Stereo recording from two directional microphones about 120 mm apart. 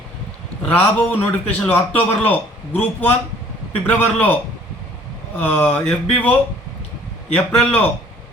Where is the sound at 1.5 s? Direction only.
15° left (ahead or behind).